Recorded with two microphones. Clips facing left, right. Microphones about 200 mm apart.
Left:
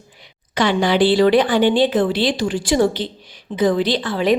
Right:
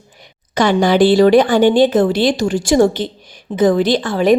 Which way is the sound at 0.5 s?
45° right (ahead or behind).